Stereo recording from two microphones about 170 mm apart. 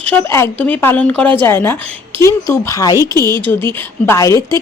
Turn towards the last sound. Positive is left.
turn(degrees=20)  # may be behind; listen again after turning